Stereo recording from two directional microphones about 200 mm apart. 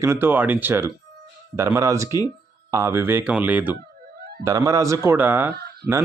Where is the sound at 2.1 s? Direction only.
20° left (ahead or behind).